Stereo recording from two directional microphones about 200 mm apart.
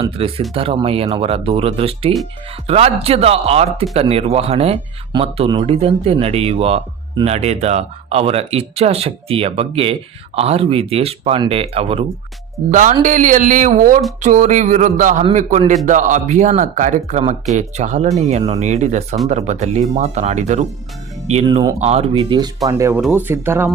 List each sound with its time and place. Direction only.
0.2 s speech: 30° right (ahead or behind)
21.4 s speech: 20° right (ahead or behind)
21.8 s speech: 30° right (ahead or behind)
22.7 s speech: 10° right (ahead or behind)